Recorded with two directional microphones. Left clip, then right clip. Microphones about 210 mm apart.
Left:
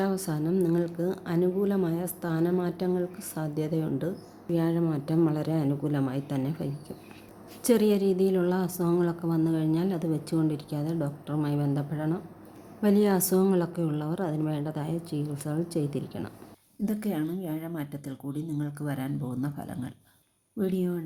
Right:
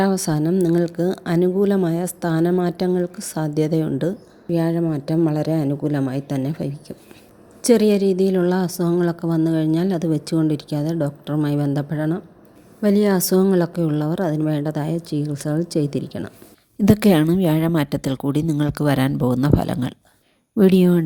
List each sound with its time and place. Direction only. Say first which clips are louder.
0.0 s a woman's voice: right 9 dB; 35° right (ahead or behind)
16.8 s a woman's voice: right 15 dB; 45° right (ahead or behind)